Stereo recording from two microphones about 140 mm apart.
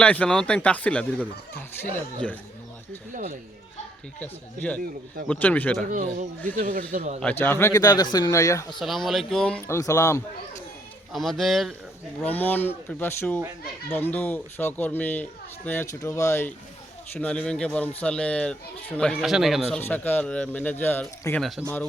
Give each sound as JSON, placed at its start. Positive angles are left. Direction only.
{"t": 0.0, "sound": "a man's voice", "side_deg": 10}
{"t": 3.1, "sound": "speech", "side_deg": -65}
{"t": 4.2, "sound": "a man's voice", "side_deg": 10}
{"t": 5.8, "sound": "speech", "side_deg": -70}
{"t": 6.6, "sound": "speech", "side_deg": -85}
{"t": 7.2, "sound": "a man's voice", "side_deg": 15}
{"t": 8.8, "sound": "speech", "side_deg": 0}
{"t": 9.6, "sound": "a man's voice", "side_deg": 20}
{"t": 11.1, "sound": "speech", "side_deg": 0}
{"t": 12.2, "sound": "a man's voice", "side_deg": 10}
{"t": 17.2, "sound": "a man's voice", "side_deg": 10}
{"t": 19.8, "sound": "a man's voice", "side_deg": 15}